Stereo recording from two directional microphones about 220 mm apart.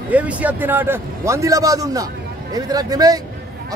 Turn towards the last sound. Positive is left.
turn(degrees=-15)  # may be behind; listen again after turning